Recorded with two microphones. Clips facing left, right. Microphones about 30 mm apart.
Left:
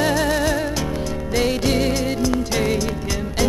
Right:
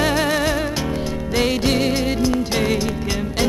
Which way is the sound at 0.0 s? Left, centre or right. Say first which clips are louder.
Even; right.